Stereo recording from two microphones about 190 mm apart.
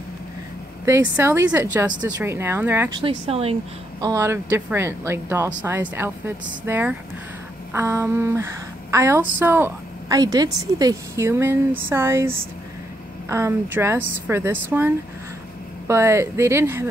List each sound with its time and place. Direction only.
0.8 s a woman's voice: 15° right (ahead or behind)
2.9 s speech: 30° right (ahead or behind)
4.0 s a woman's voice: 15° right (ahead or behind)